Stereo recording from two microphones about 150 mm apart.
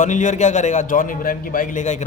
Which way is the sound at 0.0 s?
55° left (ahead or behind).